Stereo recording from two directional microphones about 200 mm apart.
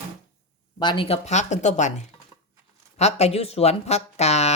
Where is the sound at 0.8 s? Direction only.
25° left (ahead or behind).